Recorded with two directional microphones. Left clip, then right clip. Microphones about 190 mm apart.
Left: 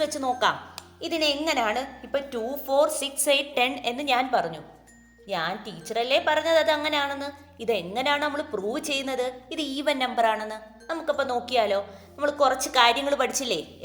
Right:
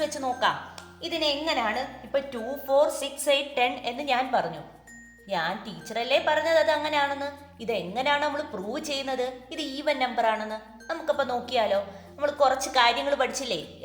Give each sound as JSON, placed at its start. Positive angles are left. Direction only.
{"t": 0.0, "sound": "a woman's voice", "side_deg": 50}